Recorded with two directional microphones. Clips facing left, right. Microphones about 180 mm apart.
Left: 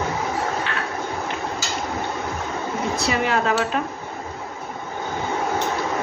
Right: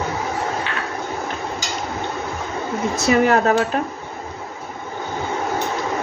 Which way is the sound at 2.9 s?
45° right (ahead or behind).